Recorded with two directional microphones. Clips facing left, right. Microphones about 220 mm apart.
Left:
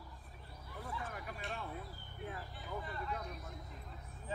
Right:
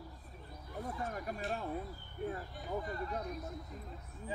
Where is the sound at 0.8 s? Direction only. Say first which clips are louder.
Right 5 dB; 40° right (ahead or behind).